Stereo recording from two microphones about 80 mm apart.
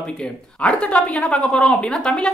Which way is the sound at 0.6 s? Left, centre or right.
Centre.